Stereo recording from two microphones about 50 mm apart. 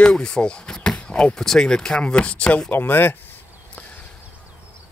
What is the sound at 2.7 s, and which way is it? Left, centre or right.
Speech, left.